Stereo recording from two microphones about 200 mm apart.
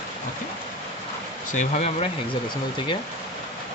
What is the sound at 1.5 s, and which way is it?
Speech, 35° left (ahead or behind).